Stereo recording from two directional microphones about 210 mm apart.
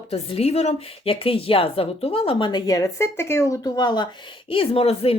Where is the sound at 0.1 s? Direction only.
30° left (ahead or behind).